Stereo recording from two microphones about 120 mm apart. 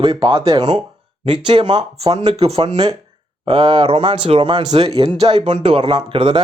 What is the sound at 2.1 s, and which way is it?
Speech, 60° right (ahead or behind).